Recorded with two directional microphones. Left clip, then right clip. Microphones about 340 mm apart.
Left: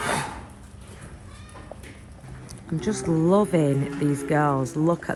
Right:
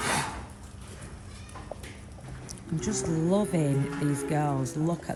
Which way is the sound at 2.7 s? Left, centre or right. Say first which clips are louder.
Left 5 dB; centre.